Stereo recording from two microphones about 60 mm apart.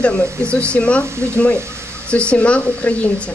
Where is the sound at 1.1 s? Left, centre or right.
Right.